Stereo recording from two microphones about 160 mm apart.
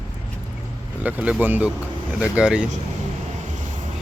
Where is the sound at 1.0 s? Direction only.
10° right (ahead or behind).